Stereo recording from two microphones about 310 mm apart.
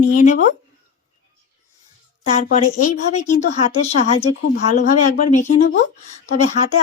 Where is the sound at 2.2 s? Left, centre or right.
Left.